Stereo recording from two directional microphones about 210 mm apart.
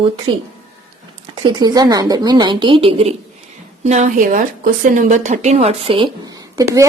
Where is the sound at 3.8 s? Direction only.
35° right (ahead or behind); by 6.8 s 15° right (ahead or behind).